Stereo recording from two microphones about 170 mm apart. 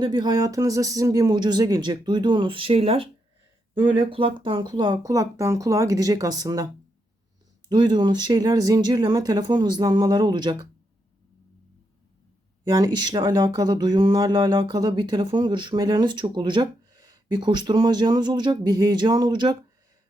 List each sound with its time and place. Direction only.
0.0 s speech: 25° right (ahead or behind)
7.7 s speech: 25° right (ahead or behind)
12.6 s speech: 20° right (ahead or behind)